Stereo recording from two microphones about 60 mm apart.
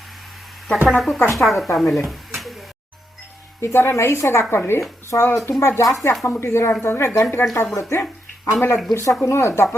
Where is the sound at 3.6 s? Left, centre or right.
Left.